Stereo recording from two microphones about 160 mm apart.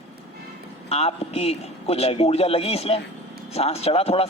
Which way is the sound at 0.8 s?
40° left (ahead or behind).